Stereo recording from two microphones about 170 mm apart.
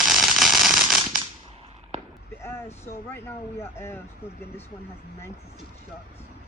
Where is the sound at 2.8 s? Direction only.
15° left (ahead or behind).